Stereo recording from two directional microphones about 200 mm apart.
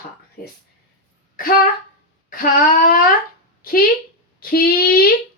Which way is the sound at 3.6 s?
45° left (ahead or behind).